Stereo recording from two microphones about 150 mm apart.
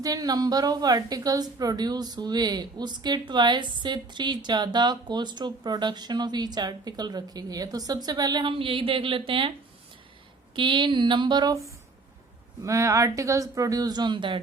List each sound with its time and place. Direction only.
0.0 s a woman's voice: 25° right (ahead or behind)
10.5 s a woman's voice: 30° right (ahead or behind)
12.6 s a woman's voice: 20° right (ahead or behind)